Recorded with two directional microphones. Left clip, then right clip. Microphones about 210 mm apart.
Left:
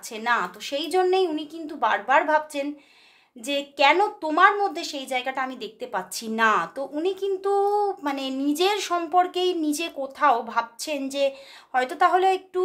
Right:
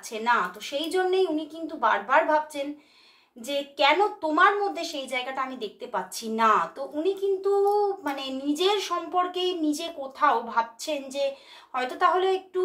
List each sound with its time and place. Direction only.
0.1 s a woman's voice: 50° left (ahead or behind)